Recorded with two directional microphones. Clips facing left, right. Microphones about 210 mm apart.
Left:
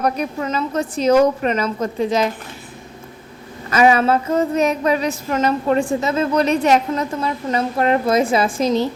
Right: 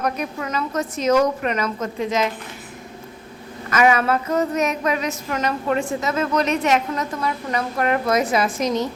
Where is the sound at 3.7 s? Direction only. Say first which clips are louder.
Left 3 dB; 30° left (ahead or behind).